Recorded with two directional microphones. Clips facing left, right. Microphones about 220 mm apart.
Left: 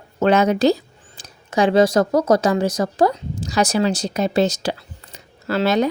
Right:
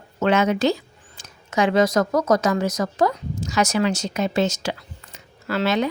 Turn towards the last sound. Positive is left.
turn(degrees=40)  # may be behind; listen again after turning